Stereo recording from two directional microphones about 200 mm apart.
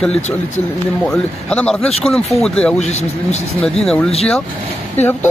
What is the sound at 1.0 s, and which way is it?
A man's voice, 5° left (ahead or behind).